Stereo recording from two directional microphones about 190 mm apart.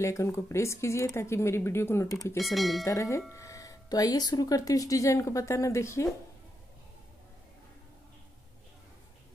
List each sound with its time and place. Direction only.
0.0 s speech: 15° left (ahead or behind)
2.3 s speech: centre (ahead or behind)
2.8 s speech: 15° left (ahead or behind)